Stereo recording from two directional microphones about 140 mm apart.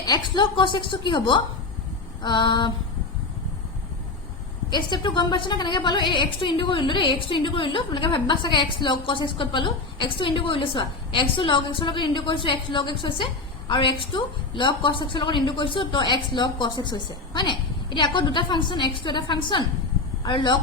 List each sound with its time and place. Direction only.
0.0 s a woman's voice: 30° left (ahead or behind)
4.7 s a woman's voice: 35° left (ahead or behind)